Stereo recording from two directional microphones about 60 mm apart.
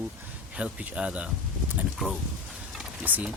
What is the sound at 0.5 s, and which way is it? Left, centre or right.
Speech, centre.